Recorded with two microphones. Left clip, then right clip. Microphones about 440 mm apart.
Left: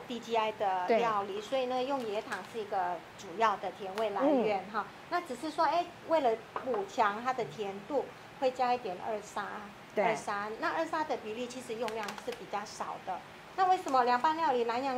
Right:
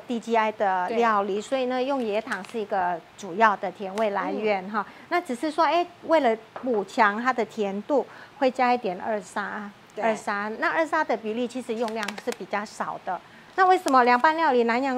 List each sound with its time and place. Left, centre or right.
0.1 s a woman's voice: right
13.6 s a woman's voice: right